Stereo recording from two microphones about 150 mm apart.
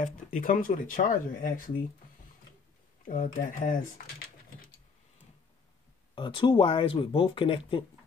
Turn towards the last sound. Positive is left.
turn(degrees=35)  # may be behind; listen again after turning